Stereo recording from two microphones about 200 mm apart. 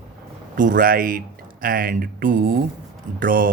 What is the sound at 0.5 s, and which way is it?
Speech, 40° right (ahead or behind).